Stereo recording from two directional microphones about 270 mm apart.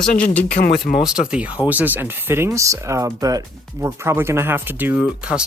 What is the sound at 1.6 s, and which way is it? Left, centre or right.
Speech, centre.